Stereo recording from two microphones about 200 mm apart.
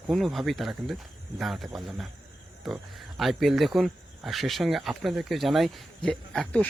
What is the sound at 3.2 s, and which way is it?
Speech, centre (ahead or behind).